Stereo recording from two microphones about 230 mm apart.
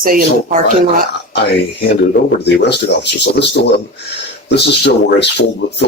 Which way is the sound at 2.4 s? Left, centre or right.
Left.